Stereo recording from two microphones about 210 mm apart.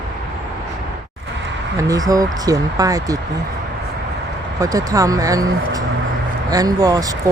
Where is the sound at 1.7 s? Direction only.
15° right (ahead or behind).